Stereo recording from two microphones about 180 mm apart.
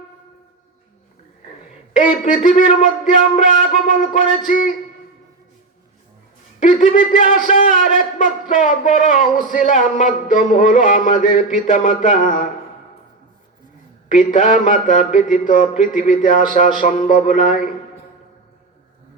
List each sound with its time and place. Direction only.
1.9 s a man's voice: 45° left (ahead or behind)
6.6 s a man's voice: 45° left (ahead or behind)
14.1 s a man's voice: 45° left (ahead or behind)